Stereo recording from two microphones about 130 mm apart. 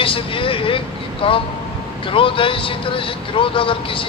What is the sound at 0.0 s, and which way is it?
Speech, 45° left (ahead or behind).